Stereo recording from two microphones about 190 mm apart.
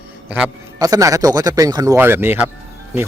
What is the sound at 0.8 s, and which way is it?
Speech, 20° right (ahead or behind).